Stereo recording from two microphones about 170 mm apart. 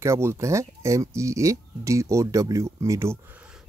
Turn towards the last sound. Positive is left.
turn(degrees=-15)  # may be behind; listen again after turning